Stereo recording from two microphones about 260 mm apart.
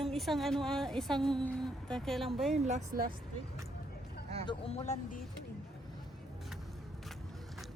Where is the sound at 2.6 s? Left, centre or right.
Right.